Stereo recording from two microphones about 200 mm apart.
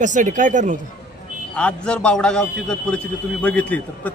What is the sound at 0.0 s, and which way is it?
Speech, 40° right (ahead or behind).